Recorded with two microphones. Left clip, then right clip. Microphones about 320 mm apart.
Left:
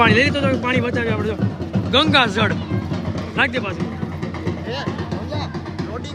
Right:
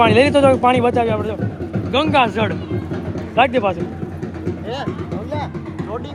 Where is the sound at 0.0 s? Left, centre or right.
Centre.